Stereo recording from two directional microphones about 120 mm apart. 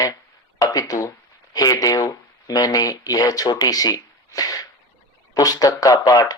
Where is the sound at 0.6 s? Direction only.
30° left (ahead or behind).